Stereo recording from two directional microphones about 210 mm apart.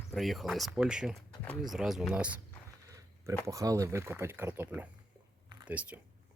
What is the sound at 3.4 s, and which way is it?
Speech, 15° right (ahead or behind).